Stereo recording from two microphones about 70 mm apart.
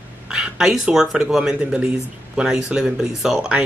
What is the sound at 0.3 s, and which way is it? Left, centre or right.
Speech, centre.